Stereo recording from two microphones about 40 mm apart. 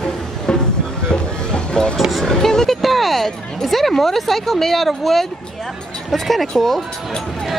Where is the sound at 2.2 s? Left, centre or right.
Centre.